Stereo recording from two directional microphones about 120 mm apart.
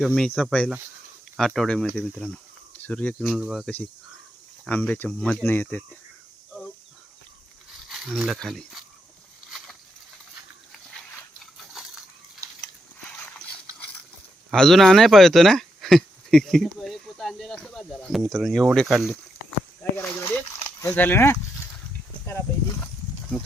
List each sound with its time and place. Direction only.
0.0 s speech: centre (ahead or behind)
1.4 s speech: centre (ahead or behind)
3.2 s speech: centre (ahead or behind)
4.6 s speech: 10° left (ahead or behind)
7.9 s speech: centre (ahead or behind)
9.5 s a sound: centre (ahead or behind)
13.0 s dog: 15° left (ahead or behind)
14.5 s speech: 5° left (ahead or behind)
19.8 s a sound: 20° left (ahead or behind)